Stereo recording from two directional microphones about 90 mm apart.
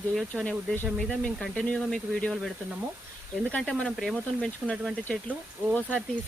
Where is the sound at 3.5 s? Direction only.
10° left (ahead or behind).